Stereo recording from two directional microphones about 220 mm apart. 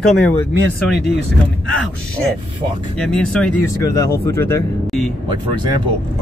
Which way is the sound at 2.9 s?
5° left (ahead or behind).